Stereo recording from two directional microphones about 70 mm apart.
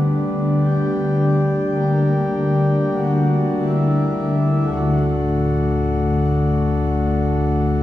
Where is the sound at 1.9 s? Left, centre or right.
Centre.